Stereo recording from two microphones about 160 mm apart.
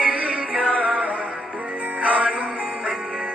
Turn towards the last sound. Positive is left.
turn(degrees=-5)  # may be behind; listen again after turning